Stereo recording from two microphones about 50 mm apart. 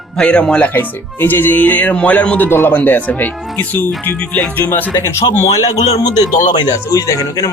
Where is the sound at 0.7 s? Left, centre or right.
Left.